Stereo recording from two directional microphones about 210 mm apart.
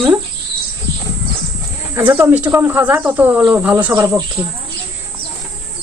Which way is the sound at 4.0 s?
20° right (ahead or behind).